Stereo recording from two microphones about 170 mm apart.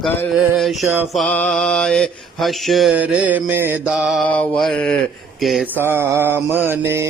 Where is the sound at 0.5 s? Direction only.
Centre (ahead or behind).